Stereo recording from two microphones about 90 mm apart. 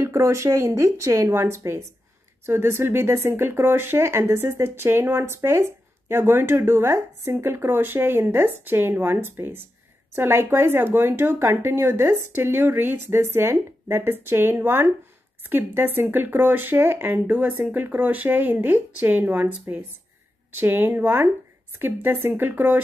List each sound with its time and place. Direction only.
0.0 s speech: 35° right (ahead or behind)
20.5 s speech: 25° right (ahead or behind)